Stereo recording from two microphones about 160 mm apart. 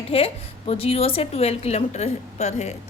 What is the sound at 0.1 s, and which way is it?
A woman's voice, 35° left (ahead or behind).